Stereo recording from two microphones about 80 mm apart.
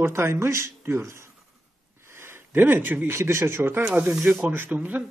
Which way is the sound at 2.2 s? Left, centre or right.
Right.